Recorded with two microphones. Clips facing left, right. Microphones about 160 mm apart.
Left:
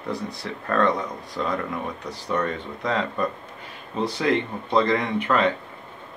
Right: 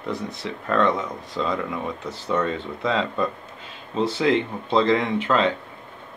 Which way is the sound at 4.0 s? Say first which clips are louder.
Right 2 dB; 25° right (ahead or behind).